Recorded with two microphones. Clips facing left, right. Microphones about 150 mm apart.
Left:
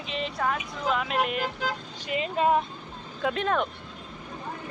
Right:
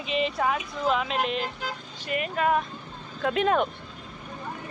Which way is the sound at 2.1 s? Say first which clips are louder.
Left 1 dB; 25° left (ahead or behind).